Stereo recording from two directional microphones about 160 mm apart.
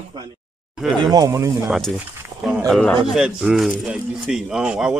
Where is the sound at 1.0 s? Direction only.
20° right (ahead or behind).